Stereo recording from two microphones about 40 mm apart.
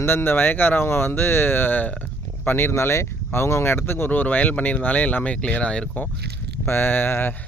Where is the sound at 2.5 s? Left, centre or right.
Left.